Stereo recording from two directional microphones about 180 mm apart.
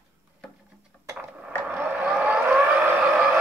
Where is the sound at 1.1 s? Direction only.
10° right (ahead or behind).